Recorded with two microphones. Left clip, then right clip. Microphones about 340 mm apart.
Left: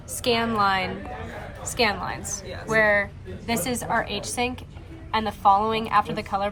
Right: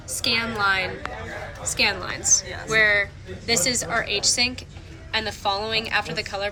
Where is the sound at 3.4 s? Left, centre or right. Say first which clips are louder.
Right 4 dB; left.